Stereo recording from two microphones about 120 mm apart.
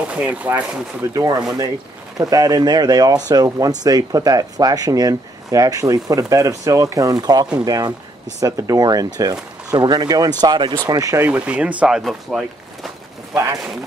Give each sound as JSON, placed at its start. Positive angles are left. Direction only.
{"t": 0.1, "sound": "speech", "side_deg": -10}
{"t": 1.1, "sound": "speech", "side_deg": -30}
{"t": 10.9, "sound": "speech", "side_deg": -30}
{"t": 11.2, "sound": "speech", "side_deg": -10}